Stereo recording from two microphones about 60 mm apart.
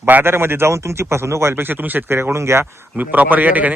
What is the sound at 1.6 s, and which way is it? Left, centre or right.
Speech, right.